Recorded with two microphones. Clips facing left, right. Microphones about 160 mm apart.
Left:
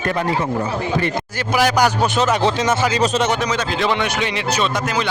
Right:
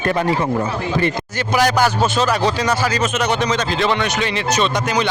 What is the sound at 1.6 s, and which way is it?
Speech, 10° left (ahead or behind).